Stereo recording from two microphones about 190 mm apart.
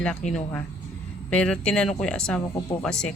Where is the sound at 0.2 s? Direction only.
40° left (ahead or behind).